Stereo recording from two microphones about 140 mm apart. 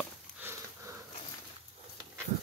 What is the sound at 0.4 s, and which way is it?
Sniff, 15° right (ahead or behind).